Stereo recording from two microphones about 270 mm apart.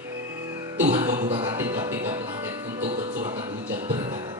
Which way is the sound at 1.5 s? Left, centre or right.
Centre.